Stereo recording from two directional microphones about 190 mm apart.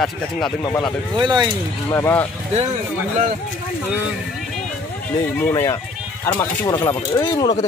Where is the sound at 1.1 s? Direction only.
25° right (ahead or behind).